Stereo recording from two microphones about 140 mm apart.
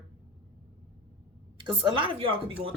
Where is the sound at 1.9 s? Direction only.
40° right (ahead or behind).